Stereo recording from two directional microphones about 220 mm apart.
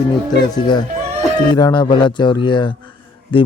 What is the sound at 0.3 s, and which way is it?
A man's voice, 20° left (ahead or behind).